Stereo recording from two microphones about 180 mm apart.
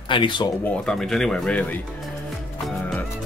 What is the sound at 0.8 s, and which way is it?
Speech, 5° left (ahead or behind).